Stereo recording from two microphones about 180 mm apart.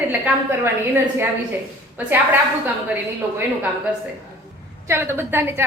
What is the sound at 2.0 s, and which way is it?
Speech, 10° right (ahead or behind).